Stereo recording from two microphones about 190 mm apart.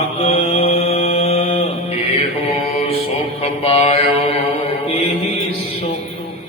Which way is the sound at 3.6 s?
30° left (ahead or behind).